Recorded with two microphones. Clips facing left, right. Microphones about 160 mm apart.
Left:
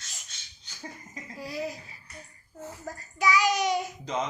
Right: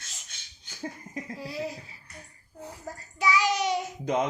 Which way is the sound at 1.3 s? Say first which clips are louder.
Left 1 dB; 25° right (ahead or behind).